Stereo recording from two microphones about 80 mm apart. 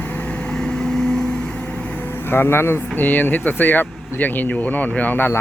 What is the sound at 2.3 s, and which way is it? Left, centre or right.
Speech, left.